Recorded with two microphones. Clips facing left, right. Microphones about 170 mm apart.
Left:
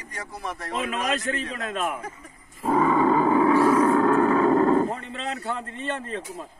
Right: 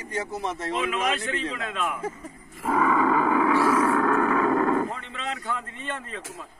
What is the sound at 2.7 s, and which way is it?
Roar, 30° left (ahead or behind).